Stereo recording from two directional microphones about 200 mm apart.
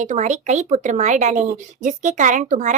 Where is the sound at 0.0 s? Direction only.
35° right (ahead or behind).